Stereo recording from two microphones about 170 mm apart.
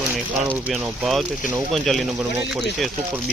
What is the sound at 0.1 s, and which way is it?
Speech, 10° right (ahead or behind).